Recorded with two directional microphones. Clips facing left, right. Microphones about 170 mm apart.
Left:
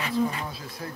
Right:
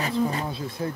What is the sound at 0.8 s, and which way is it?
Speech, 25° right (ahead or behind).